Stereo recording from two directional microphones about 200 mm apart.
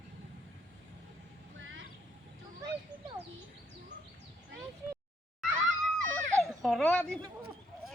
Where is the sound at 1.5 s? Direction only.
70° right (ahead or behind).